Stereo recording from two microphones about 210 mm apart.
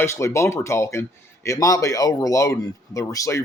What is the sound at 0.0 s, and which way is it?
Speech, 15° left (ahead or behind).